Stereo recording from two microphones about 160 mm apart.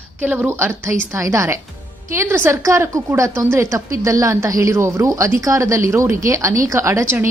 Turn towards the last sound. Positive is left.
turn(degrees=-15)  # may be behind; listen again after turning